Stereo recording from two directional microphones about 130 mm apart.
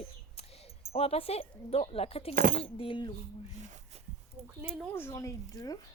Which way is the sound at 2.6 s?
45° left (ahead or behind).